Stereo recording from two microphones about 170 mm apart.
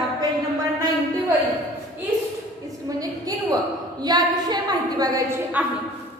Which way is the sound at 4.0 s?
25° right (ahead or behind).